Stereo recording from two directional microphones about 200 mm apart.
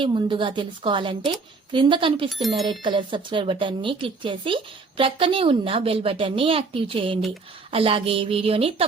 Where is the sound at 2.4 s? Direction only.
Centre (ahead or behind).